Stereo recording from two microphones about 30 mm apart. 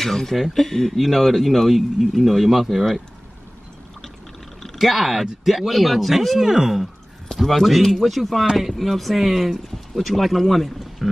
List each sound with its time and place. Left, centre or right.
0.0 s speech: centre
1.0 s speech: centre
4.7 s speech: centre
6.4 s speech: centre
7.3 s a sound: left
7.6 s speech: centre
11.0 s a sound: centre